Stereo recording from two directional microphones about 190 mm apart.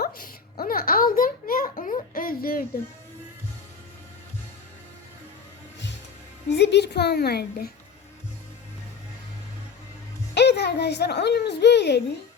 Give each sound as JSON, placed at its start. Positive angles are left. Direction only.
{"t": 0.0, "sound": "a sound", "side_deg": 50}
{"t": 6.5, "sound": "a woman's voice", "side_deg": 65}
{"t": 10.3, "sound": "a woman's voice", "side_deg": 60}